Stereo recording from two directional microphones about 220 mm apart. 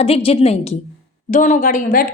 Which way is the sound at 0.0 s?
25° left (ahead or behind).